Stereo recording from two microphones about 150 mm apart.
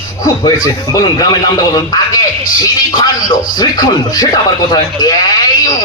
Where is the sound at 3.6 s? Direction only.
25° left (ahead or behind).